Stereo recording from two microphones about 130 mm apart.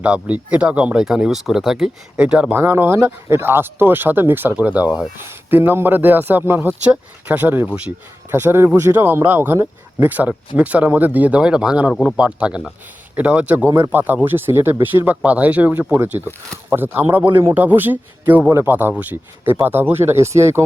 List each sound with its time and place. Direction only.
0.0 s speech: 10° right (ahead or behind)
13.7 s speech: 20° right (ahead or behind)